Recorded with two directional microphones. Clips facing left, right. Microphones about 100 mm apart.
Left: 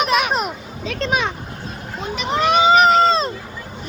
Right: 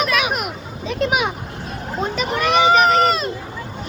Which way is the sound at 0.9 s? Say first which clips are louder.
Right 1 dB; 10° right (ahead or behind).